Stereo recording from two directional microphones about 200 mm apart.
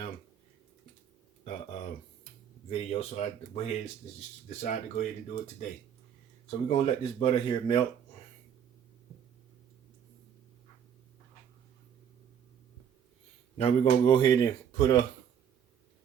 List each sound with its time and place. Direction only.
2.6 s speech: 30° left (ahead or behind)
6.7 s speech: 30° left (ahead or behind)
13.6 s speech: 30° left (ahead or behind)